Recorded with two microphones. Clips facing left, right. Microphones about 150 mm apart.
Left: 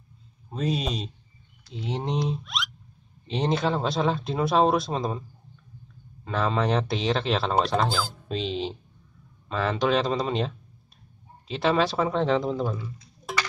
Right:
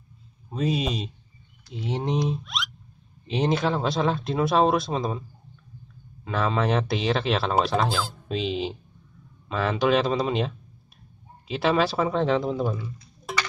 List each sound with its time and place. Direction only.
0.5 s speech: 5° right (ahead or behind)
6.2 s speech: centre (ahead or behind)
13.2 s a sound: centre (ahead or behind)